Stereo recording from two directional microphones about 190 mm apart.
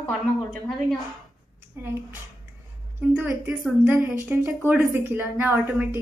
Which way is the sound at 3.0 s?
10° right (ahead or behind).